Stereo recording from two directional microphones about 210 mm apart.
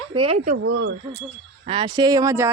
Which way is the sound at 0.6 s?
65° right (ahead or behind).